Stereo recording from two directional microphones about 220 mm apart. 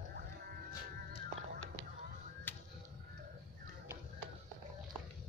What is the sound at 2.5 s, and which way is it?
Music, 10° left (ahead or behind).